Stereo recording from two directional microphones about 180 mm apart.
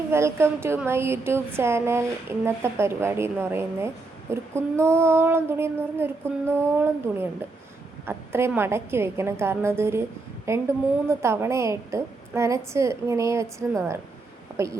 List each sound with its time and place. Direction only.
0.1 s speech: 15° right (ahead or behind)